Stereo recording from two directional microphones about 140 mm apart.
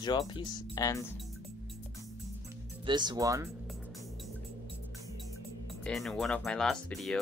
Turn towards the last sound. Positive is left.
turn(degrees=5)  # may be behind; listen again after turning